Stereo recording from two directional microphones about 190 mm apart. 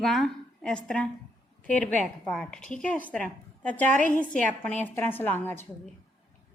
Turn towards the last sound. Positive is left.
turn(degrees=10)  # may be behind; listen again after turning